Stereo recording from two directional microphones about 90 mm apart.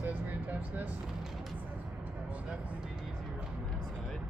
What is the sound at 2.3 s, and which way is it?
Speech, 15° right (ahead or behind).